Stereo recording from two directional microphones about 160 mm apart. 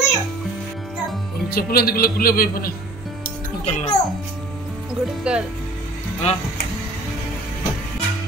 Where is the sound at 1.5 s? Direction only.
70° left (ahead or behind).